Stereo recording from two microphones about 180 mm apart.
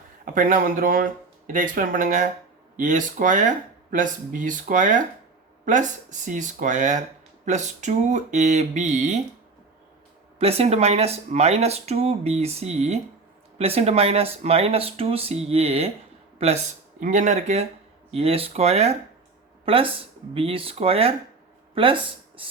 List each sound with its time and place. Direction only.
0.3 s speech: 50° right (ahead or behind)
10.3 s speech: 35° right (ahead or behind)
17.0 s speech: 45° right (ahead or behind)